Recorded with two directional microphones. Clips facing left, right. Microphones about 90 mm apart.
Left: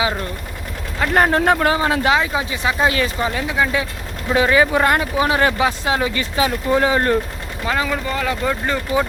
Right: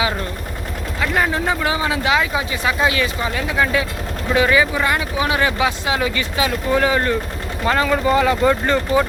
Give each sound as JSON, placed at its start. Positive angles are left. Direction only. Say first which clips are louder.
{"t": 0.9, "sound": "speech", "louder": "left 3 dB", "side_deg": 35}
{"t": 1.2, "sound": "speech", "louder": "left 6 dB", "side_deg": 55}
{"t": 1.5, "sound": "speech", "louder": "left 3 dB", "side_deg": 40}
{"t": 3.5, "sound": "speech", "louder": "right 3 dB", "side_deg": 20}
{"t": 4.4, "sound": "speech", "louder": "even", "side_deg": 30}
{"t": 4.6, "sound": "speech", "louder": "left 3 dB", "side_deg": 50}
{"t": 7.6, "sound": "speech", "louder": "right 4 dB", "side_deg": 0}